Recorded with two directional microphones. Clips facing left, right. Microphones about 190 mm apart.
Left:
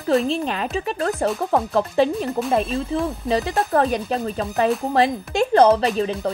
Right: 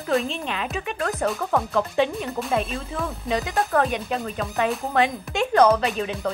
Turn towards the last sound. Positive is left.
turn(degrees=30)  # may be behind; listen again after turning